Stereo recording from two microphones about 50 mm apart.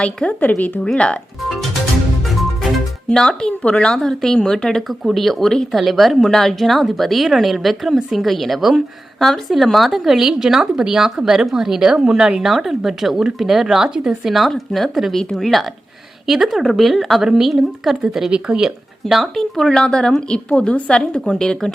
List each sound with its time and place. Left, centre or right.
0.0 s a woman's voice: left
0.3 s speech: left
0.9 s a woman's voice: left
2.2 s music: centre
3.1 s a woman's voice: centre
4.9 s a woman's voice: centre
14.5 s a woman's voice: centre
18.3 s speech: centre
19.2 s a woman's voice: centre